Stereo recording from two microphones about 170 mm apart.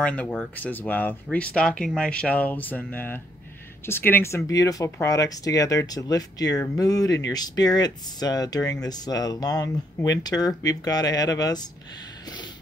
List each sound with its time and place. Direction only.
0.0 s speech: 10° left (ahead or behind)